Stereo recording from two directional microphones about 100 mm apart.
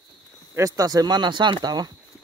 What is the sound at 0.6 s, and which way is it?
Speech, 35° right (ahead or behind).